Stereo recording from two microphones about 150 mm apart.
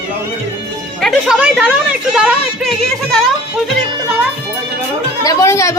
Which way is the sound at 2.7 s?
5° left (ahead or behind).